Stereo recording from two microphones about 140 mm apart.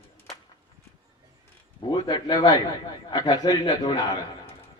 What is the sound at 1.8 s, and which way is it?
A man's voice, 35° left (ahead or behind).